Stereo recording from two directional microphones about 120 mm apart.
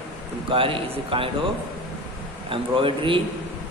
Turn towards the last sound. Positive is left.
turn(degrees=-45)  # may be behind; listen again after turning